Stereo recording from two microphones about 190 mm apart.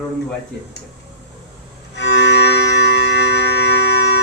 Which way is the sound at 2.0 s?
65° left (ahead or behind).